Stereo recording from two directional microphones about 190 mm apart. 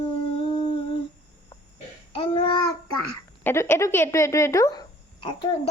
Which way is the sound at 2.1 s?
25° left (ahead or behind).